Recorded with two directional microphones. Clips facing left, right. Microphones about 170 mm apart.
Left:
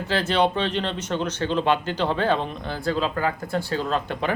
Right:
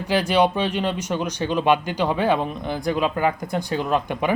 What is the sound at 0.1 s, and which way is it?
Speech, 15° right (ahead or behind).